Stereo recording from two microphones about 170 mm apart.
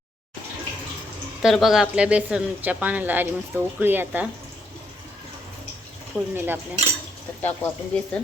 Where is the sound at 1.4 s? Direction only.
Centre (ahead or behind).